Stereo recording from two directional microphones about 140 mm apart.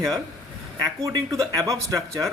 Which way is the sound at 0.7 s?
30° right (ahead or behind).